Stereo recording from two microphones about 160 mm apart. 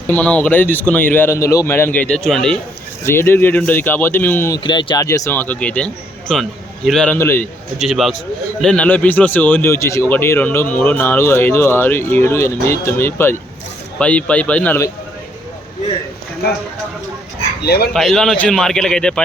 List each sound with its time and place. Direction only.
0.1 s speech: 10° left (ahead or behind)
3.0 s speech: 15° left (ahead or behind)
4.5 s speech: 30° left (ahead or behind)
5.0 s a man's voice: 20° left (ahead or behind)
7.2 s speech: 15° left (ahead or behind)
7.8 s a man's voice: centre (ahead or behind)
17.7 s speech: 90° left
17.9 s a man's voice: 5° left (ahead or behind)